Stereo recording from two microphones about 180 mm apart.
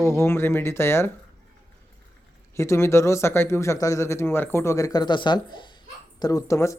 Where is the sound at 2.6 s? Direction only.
15° left (ahead or behind).